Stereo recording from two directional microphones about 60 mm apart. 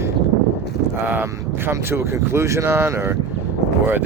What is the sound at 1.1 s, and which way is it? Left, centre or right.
Speech, right.